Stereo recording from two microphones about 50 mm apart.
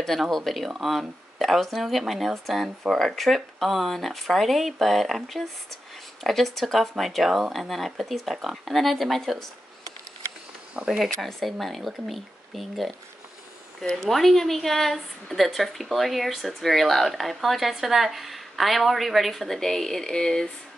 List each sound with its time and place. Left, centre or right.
0.2 s a woman's voice: centre
10.8 s speech: right
11.1 s a woman's voice: centre
13.9 s a woman's voice: centre